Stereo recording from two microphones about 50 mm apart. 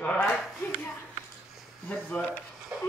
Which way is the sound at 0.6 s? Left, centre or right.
Left.